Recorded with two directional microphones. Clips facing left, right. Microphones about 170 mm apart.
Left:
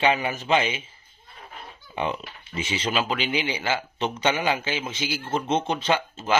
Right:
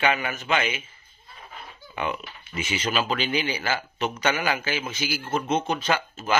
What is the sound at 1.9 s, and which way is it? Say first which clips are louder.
Speech: left 2 dB; 30° left (ahead or behind).